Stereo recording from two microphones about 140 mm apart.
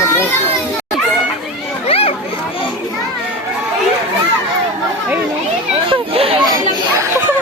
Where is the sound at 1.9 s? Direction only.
45° left (ahead or behind).